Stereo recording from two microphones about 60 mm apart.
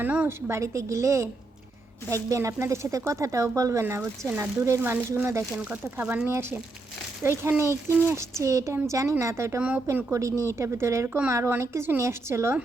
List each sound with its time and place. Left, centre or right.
0.0 s speech: right
0.3 s speech: right
0.6 s speech: right
3.8 s speech: right
4.8 s speech: right
5.7 s speech: right
7.2 s speech: right
9.6 s speech: right
9.9 s speech: right